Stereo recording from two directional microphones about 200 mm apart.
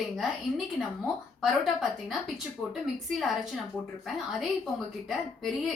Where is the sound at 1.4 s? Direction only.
Centre (ahead or behind).